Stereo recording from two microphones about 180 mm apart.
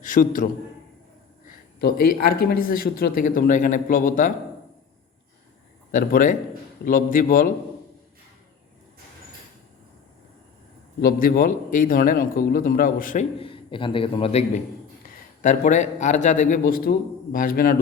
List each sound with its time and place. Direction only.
0.0 s a man's voice: 50° left (ahead or behind)
1.5 s speech: 55° left (ahead or behind)
5.9 s speech: 45° left (ahead or behind)
11.0 s speech: 55° left (ahead or behind)
13.4 s a man's voice: 30° left (ahead or behind); by 17.7 s 50° left (ahead or behind)